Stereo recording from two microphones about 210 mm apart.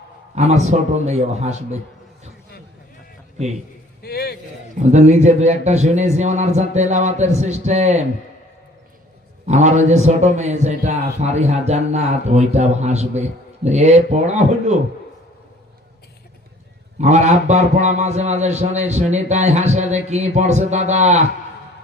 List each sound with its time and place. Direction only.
0.3 s a man's voice: 30° right (ahead or behind)
4.0 s a sound: 50° left (ahead or behind)
4.7 s a man's voice: 35° right (ahead or behind)
9.5 s a man's voice: 35° right (ahead or behind)
17.0 s a man's voice: 35° right (ahead or behind)